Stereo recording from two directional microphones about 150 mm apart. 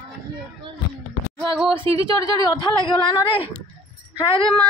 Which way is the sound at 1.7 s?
35° right (ahead or behind).